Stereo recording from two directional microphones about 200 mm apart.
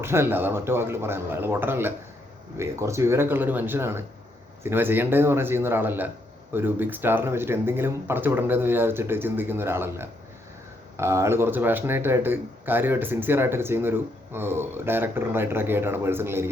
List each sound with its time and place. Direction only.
0.0 s speech: 10° right (ahead or behind)